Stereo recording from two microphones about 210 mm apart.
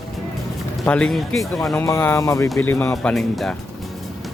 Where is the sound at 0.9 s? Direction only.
5° left (ahead or behind).